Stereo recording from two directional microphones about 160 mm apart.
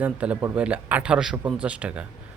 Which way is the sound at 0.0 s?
10° right (ahead or behind).